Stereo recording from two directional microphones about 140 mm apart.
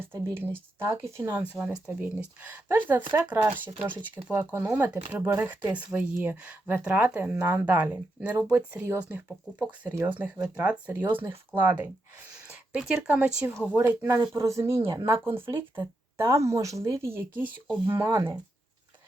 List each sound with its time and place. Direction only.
0.0 s speech: 15° right (ahead or behind)